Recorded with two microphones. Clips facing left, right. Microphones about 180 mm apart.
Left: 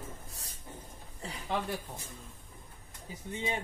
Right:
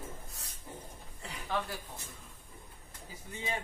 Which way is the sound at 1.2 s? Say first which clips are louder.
Left 1 dB; 25° left (ahead or behind).